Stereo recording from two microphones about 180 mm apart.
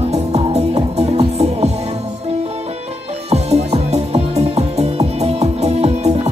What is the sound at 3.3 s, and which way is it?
Music, 35° right (ahead or behind).